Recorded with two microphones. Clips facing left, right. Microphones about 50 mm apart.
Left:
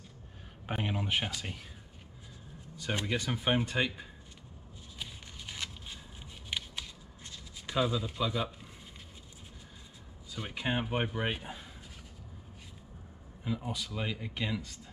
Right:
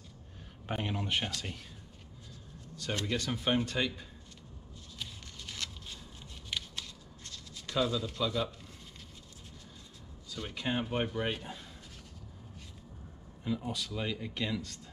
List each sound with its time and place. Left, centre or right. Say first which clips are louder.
0.7 s a man's voice: left 1 dB; centre
2.8 s a man's voice: left 1 dB; centre
4.9 s a sound: even; centre
6.5 s shuffling cards: left 1 dB; centre
10.3 s a man's voice: left 1 dB; centre
13.4 s a man's voice: right 1 dB; centre